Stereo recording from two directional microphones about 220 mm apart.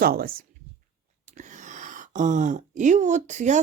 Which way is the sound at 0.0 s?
45° right (ahead or behind).